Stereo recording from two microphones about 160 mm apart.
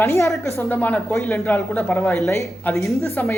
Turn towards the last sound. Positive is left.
turn(degrees=15)  # may be behind; listen again after turning